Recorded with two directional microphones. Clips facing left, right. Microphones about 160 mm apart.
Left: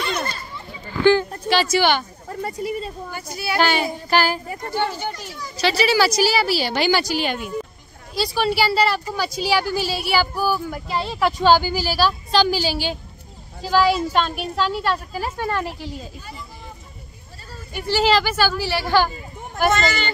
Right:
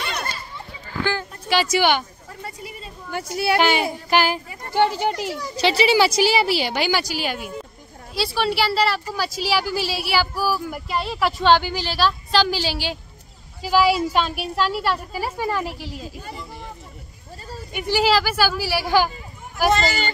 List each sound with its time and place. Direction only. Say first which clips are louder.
1.0 s a sound: left 11 dB; 10° right (ahead or behind)
3.1 s speech: right 5 dB; 70° right (ahead or behind)
3.5 s a woman's voice: left 1 dB; 15° right (ahead or behind)
4.9 s speech: right 6 dB; 85° right
5.6 s a woman's voice: right 1 dB; 25° right (ahead or behind)
6.7 s a woman's voice: left 3 dB; 10° right (ahead or behind)
17.7 s a woman's voice: left 1 dB; 15° right (ahead or behind)
19.7 s speech: even; 40° right (ahead or behind)